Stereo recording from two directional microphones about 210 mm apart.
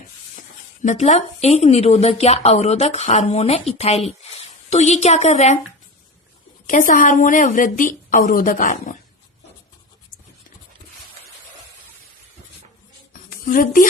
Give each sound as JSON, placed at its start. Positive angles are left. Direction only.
{"t": 0.8, "sound": "a woman's voice", "side_deg": 35}
{"t": 6.7, "sound": "a woman's voice", "side_deg": 40}
{"t": 13.4, "sound": "speech", "side_deg": 40}